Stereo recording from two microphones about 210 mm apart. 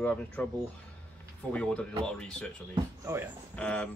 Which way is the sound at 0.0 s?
5° left (ahead or behind).